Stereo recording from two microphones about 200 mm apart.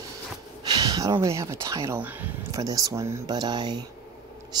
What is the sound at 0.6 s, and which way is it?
Speech, 20° right (ahead or behind).